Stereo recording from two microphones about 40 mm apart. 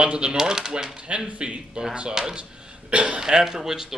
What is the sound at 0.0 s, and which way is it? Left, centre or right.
Speech, right.